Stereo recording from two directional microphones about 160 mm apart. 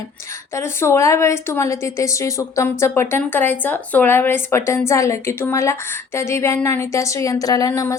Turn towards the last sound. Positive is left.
turn(degrees=20)  # may be behind; listen again after turning